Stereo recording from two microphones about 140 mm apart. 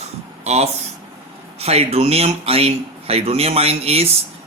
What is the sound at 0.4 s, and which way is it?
A man's voice, 50° right (ahead or behind).